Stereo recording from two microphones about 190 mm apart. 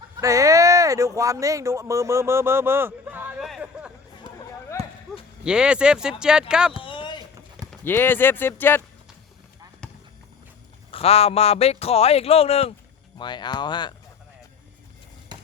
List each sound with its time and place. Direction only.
0.2 s speech: 15° right (ahead or behind)
4.3 s run: 25° right (ahead or behind)
4.8 s clip-clop: 30° right (ahead or behind)
5.5 s speech: 5° right (ahead or behind)
6.7 s a sound: 25° left (ahead or behind)
7.7 s speech: 10° left (ahead or behind)
9.8 s clip-clop: 5° left (ahead or behind)
10.9 s a man's voice: 30° left (ahead or behind)
15.3 s a sound: 25° right (ahead or behind)